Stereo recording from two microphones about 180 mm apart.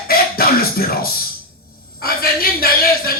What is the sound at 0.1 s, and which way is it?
Music, 55° left (ahead or behind).